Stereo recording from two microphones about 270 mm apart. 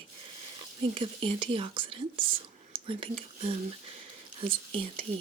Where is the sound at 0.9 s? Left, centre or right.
Centre.